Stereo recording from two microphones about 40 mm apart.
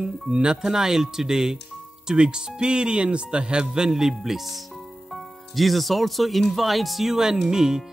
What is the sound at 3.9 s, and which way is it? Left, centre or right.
Speech, centre.